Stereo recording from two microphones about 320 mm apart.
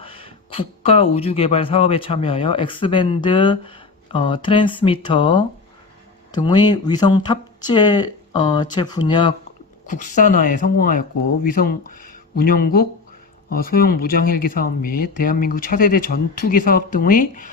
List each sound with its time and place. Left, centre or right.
0.0 s speech: centre